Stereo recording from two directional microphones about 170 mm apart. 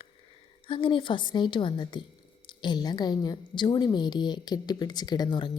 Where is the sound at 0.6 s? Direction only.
30° left (ahead or behind).